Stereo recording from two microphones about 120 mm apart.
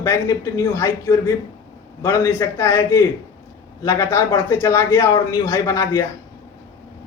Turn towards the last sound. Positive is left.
turn(degrees=30)  # may be behind; listen again after turning